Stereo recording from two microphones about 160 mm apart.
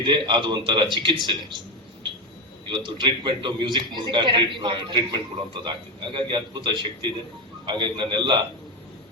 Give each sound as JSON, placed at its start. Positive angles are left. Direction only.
{"t": 0.0, "sound": "a man's voice", "side_deg": -30}
{"t": 2.6, "sound": "a man's voice", "side_deg": -30}
{"t": 6.1, "sound": "a man's voice", "side_deg": -30}